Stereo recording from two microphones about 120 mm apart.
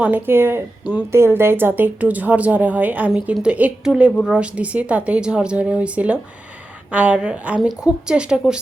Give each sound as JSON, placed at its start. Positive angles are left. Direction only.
{"t": 0.0, "sound": "speech", "side_deg": -15}